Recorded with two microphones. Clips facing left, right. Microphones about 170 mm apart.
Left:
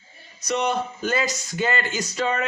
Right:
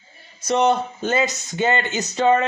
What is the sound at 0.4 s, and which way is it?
Speech, 25° right (ahead or behind).